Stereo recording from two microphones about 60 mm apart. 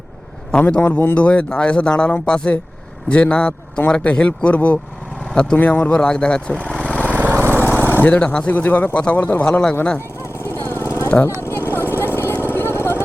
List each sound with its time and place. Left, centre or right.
0.9 s speech: left
1.1 s speech: centre
5.5 s speech: left
6.0 s speech: centre
7.2 s lawn mower: right
7.6 s vehicle: left
8.5 s speech: left
9.4 s speech: centre
10.4 s vehicle: left